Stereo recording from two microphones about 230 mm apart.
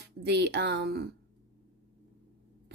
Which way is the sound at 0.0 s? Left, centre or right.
Right.